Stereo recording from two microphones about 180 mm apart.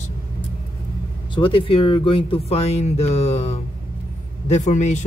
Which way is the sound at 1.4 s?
30° left (ahead or behind).